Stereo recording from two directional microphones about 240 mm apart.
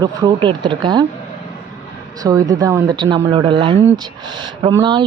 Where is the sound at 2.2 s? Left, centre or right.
Centre.